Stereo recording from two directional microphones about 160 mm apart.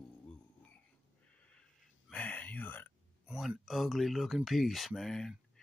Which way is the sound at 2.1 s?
10° left (ahead or behind).